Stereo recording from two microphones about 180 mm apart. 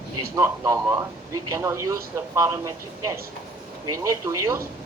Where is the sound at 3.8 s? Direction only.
20° right (ahead or behind).